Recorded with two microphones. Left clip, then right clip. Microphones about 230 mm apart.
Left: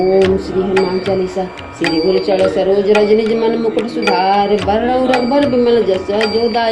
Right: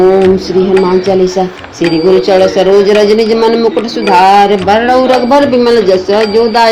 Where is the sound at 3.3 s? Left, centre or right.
Right.